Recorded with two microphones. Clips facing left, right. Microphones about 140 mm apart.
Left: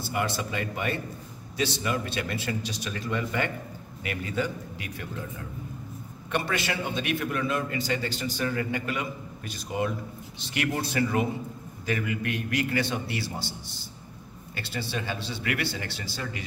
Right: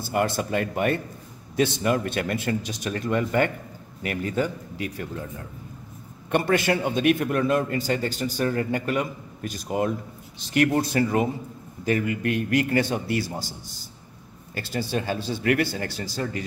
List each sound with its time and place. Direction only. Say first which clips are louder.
0.1 s a man's voice: right 6 dB; 50° right (ahead or behind)
6.3 s a man's voice: right 7 dB; 50° right (ahead or behind)
14.5 s a man's voice: right 6 dB; 45° right (ahead or behind)